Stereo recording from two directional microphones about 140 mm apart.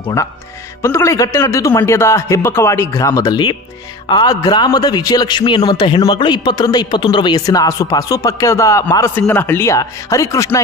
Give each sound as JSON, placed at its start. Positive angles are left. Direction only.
{"t": 0.8, "sound": "a man's voice", "side_deg": 20}